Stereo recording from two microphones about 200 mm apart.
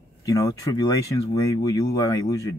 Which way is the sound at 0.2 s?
15° left (ahead or behind).